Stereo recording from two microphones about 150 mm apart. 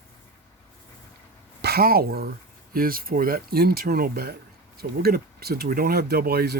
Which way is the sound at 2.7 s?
75° right (ahead or behind).